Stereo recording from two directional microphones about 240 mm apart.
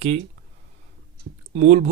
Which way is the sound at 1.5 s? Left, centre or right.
Right.